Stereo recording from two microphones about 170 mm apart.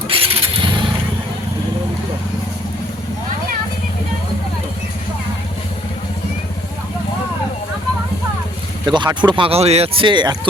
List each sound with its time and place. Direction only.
0.1 s vehicle: 35° right (ahead or behind)
8.9 s speech: 25° right (ahead or behind)